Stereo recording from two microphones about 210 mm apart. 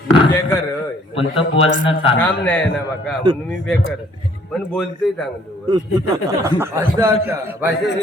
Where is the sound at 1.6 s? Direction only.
25° left (ahead or behind).